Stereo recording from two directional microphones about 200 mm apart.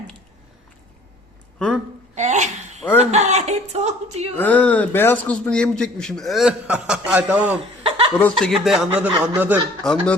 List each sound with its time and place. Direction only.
1.5 s a sound: 5° left (ahead or behind)
2.1 s a sound: 35° right (ahead or behind)
4.4 s a man's voice: 10° left (ahead or behind); by 7.5 s 5° right (ahead or behind)
7.5 s chuckle: 30° right (ahead or behind)
8.2 s a man's voice: centre (ahead or behind)
9.8 s a man's voice: 5° left (ahead or behind)